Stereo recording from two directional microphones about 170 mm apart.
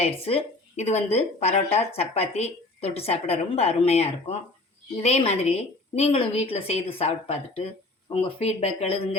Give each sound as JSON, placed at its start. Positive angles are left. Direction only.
{"t": 0.0, "sound": "a woman's voice", "side_deg": 35}